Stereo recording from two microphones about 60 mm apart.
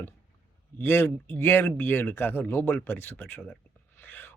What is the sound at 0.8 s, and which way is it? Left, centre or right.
Speech, left.